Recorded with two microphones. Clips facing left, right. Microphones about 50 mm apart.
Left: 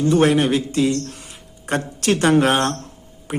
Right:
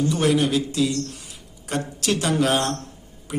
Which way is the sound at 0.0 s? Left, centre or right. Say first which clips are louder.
Left 4 dB; left.